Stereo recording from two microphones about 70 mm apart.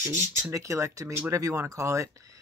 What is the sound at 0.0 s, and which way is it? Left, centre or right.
Speech, right.